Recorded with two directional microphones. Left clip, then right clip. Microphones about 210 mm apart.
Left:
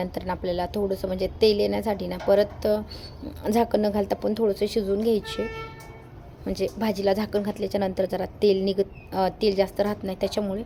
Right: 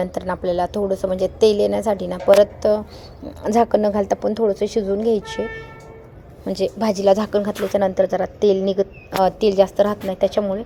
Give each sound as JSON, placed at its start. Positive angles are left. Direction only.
{"t": 0.0, "sound": "a woman's voice", "side_deg": -5}
{"t": 8.4, "sound": "a woman's voice", "side_deg": 25}
{"t": 9.2, "sound": "a woman's voice", "side_deg": -5}